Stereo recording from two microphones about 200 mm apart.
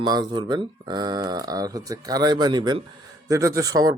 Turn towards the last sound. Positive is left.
turn(degrees=-20)  # may be behind; listen again after turning